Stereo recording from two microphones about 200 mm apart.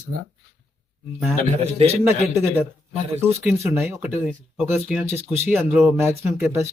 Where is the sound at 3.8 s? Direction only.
15° right (ahead or behind).